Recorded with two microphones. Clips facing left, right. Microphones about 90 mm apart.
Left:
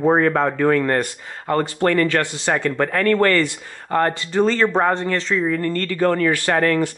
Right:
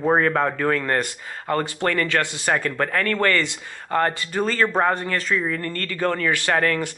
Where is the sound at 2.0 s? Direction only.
25° left (ahead or behind).